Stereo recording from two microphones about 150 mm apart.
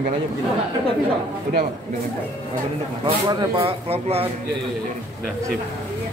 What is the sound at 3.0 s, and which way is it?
Speech, 35° right (ahead or behind).